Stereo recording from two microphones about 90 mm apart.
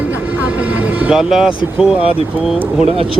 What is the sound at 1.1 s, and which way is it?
Speech, 5° right (ahead or behind).